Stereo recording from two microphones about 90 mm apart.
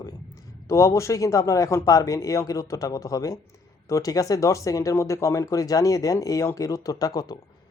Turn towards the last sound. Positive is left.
turn(degrees=45)  # may be behind; listen again after turning